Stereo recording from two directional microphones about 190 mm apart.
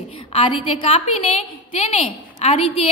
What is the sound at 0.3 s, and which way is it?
A woman's voice, 25° left (ahead or behind).